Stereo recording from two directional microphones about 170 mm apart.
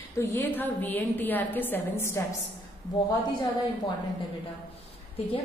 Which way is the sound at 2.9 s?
25° left (ahead or behind).